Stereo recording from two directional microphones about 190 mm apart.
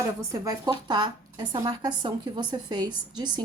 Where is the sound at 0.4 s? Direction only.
20° right (ahead or behind).